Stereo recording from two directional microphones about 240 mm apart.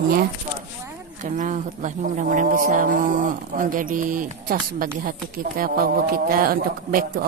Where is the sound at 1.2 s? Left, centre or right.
Right.